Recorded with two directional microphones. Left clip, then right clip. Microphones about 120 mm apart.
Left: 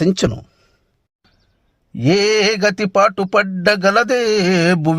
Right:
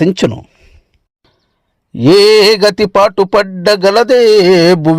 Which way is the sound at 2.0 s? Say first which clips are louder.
Right 9 dB; 30° right (ahead or behind).